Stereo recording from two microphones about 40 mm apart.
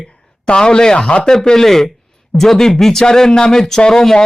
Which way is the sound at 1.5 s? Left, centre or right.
Centre.